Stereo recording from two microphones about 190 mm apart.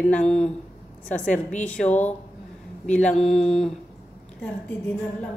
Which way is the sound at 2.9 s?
5° left (ahead or behind).